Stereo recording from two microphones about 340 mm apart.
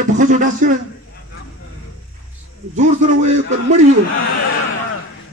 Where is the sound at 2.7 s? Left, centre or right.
Right.